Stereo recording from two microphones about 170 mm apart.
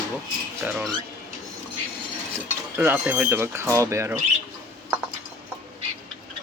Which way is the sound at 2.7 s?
10° right (ahead or behind).